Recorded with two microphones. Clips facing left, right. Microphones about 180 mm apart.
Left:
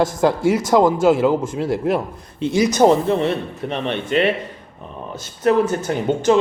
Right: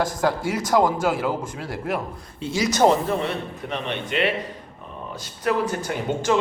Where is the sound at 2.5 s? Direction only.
55° left (ahead or behind).